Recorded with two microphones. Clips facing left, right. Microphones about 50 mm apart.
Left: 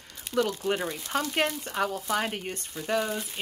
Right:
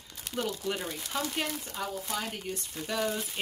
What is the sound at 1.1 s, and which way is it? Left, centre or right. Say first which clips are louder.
Speech: left 6 dB; left.